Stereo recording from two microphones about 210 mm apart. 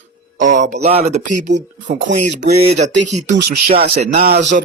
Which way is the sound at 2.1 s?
60° right (ahead or behind).